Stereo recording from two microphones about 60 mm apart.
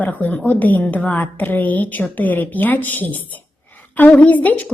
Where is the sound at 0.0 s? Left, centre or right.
Left.